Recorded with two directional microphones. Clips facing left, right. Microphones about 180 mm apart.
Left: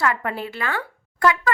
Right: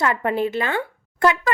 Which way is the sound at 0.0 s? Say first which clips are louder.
Right 4 dB; 25° right (ahead or behind).